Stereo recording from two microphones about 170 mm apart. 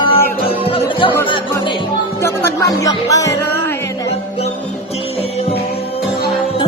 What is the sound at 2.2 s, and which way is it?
Music, 15° left (ahead or behind).